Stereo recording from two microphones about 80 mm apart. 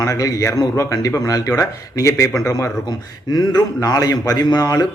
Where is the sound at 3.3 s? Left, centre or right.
Left.